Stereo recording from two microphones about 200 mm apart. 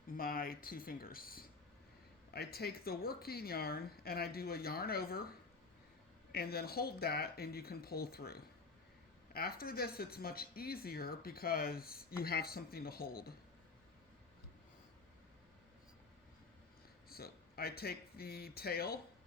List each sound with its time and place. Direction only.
0.1 s a woman's voice: 45° left (ahead or behind)
6.3 s a woman's voice: 50° left (ahead or behind)
17.1 s speech: 50° left (ahead or behind)